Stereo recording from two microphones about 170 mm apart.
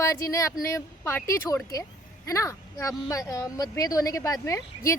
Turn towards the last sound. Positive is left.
turn(degrees=20)  # may be behind; listen again after turning